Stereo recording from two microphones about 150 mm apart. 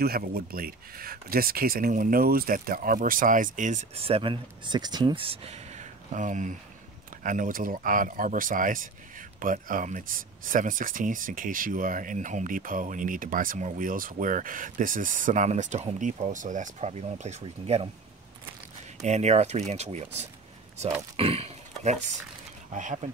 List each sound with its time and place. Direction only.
0.0 s speech: 90° right; by 17.8 s 45° right (ahead or behind)
18.9 s speech: 50° right (ahead or behind)
22.7 s speech: 55° right (ahead or behind)